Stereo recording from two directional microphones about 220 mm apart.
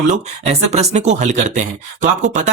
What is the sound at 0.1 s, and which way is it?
Speech, 30° right (ahead or behind).